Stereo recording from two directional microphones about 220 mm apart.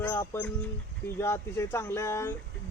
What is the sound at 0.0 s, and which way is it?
Speech, 10° left (ahead or behind).